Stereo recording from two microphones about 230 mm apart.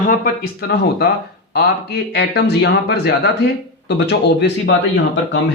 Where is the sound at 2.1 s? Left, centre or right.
Left.